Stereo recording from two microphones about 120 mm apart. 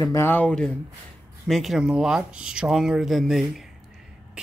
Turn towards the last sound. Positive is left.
turn(degrees=0)  # may be behind; listen again after turning